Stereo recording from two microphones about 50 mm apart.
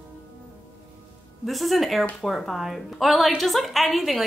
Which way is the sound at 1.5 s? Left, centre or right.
Centre.